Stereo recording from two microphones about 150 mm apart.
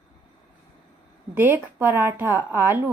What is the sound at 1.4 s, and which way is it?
Speech, 15° right (ahead or behind).